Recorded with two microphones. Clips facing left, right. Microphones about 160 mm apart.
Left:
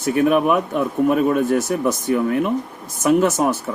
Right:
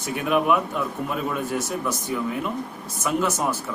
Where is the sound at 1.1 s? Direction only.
60° left (ahead or behind).